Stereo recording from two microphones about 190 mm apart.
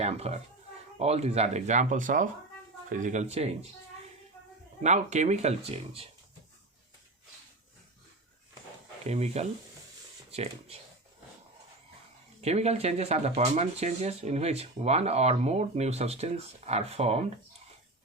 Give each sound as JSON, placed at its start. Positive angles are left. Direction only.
{"t": 0.0, "sound": "speech", "side_deg": -35}
{"t": 4.8, "sound": "speech", "side_deg": -35}
{"t": 9.0, "sound": "speech", "side_deg": -35}
{"t": 12.4, "sound": "speech", "side_deg": -35}